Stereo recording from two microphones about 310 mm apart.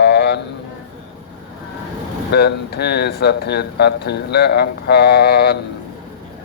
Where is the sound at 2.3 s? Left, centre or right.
Left.